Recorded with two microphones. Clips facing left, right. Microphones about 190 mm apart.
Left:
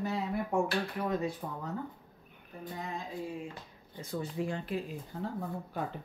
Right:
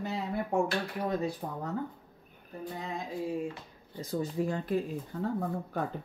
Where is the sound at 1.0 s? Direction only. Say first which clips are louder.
Right 1 dB; 35° right (ahead or behind).